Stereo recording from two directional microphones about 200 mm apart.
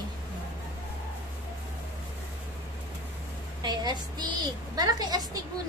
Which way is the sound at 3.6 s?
20° right (ahead or behind).